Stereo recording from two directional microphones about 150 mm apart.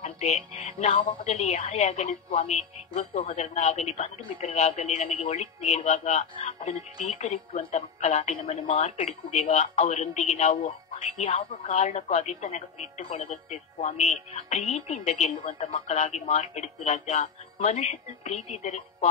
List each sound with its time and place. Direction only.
0.0 s a woman's voice: 45° left (ahead or behind)